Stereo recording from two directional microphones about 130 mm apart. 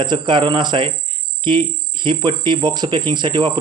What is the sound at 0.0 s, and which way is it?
Speech, 35° right (ahead or behind).